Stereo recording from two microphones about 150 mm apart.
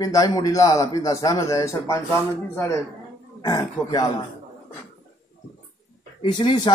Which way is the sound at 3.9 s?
25° left (ahead or behind).